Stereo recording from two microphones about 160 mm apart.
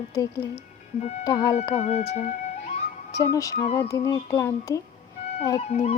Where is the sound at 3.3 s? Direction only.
20° left (ahead or behind).